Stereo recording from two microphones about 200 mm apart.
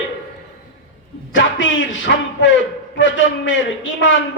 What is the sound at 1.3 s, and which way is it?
A man's voice, 70° left (ahead or behind).